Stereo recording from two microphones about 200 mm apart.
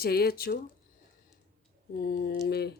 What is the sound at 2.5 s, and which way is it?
Speech, 55° left (ahead or behind).